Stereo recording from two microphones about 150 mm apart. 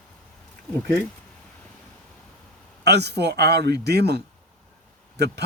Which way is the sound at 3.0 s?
90° right.